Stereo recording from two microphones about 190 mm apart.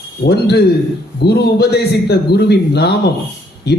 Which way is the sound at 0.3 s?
60° left (ahead or behind).